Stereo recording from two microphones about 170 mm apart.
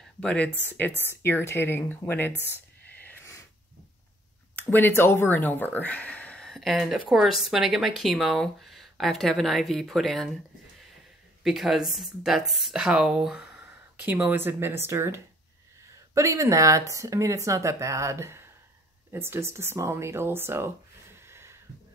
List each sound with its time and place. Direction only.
0.2 s speech: 5° left (ahead or behind)
2.9 s a sound: 10° left (ahead or behind)
4.6 s speech: 10° left (ahead or behind)
11.4 s speech: centre (ahead or behind)